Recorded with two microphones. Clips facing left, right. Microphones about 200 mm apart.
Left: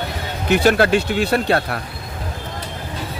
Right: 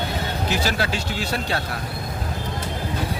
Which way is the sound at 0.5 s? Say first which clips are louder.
Left 12 dB; 60° left (ahead or behind).